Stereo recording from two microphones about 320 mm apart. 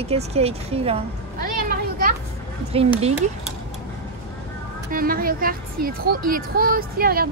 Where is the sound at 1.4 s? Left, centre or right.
Right.